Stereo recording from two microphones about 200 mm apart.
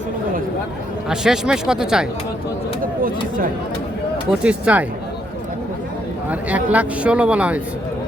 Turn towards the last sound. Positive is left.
turn(degrees=-5)  # may be behind; listen again after turning